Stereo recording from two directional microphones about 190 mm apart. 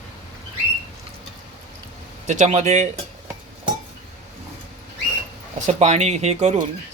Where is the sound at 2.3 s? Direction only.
40° right (ahead or behind).